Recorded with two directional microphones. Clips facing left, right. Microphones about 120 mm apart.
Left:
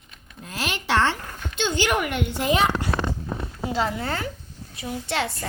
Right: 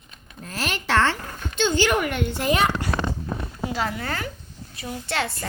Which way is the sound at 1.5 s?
15° left (ahead or behind).